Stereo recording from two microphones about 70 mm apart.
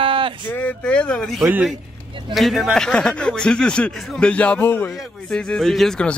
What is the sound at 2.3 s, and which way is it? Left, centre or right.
Speech, centre.